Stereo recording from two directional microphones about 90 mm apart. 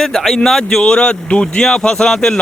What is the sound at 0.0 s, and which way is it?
Speech, 5° left (ahead or behind).